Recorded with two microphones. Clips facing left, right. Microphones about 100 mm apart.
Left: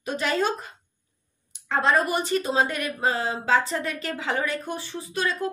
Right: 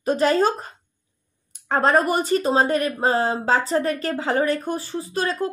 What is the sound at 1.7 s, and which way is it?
Speech, 45° right (ahead or behind).